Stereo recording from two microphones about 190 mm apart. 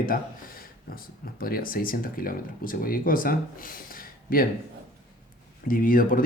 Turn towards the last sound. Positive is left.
turn(degrees=45)  # may be behind; listen again after turning